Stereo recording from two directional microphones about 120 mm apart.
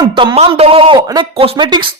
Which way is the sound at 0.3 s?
55° right (ahead or behind).